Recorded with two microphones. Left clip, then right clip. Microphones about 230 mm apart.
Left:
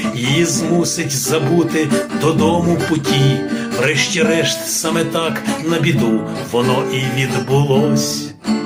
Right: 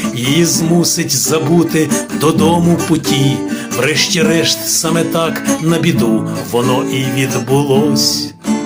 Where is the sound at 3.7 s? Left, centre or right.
Right.